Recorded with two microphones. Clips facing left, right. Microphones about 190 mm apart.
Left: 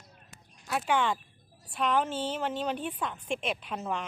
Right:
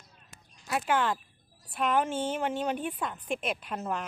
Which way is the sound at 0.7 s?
Centre (ahead or behind).